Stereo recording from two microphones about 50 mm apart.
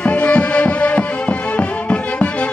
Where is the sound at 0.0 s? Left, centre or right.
Left.